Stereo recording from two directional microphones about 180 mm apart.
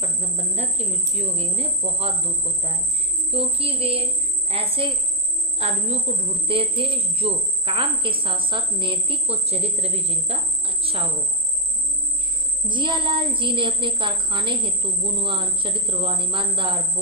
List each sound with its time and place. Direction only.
0.0 s a woman's voice: 35° right (ahead or behind)
12.6 s a woman's voice: 25° right (ahead or behind)